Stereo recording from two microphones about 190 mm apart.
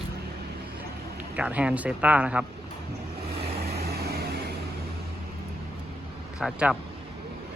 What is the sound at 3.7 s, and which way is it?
Vehicle, 55° right (ahead or behind).